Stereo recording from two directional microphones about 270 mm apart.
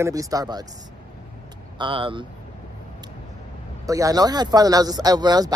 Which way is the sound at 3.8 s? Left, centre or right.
Centre.